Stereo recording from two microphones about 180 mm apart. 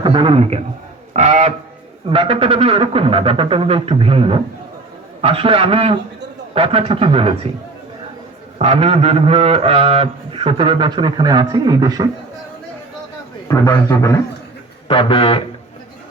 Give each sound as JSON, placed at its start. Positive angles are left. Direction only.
{"t": 0.0, "sound": "a man's voice", "side_deg": -30}
{"t": 1.1, "sound": "a sound", "side_deg": -40}
{"t": 2.0, "sound": "a man's voice", "side_deg": -30}
{"t": 8.5, "sound": "a man's voice", "side_deg": -35}
{"t": 13.5, "sound": "a man's voice", "side_deg": 15}
{"t": 14.8, "sound": "speech", "side_deg": 30}